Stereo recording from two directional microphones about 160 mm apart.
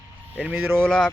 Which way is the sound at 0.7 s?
5° left (ahead or behind).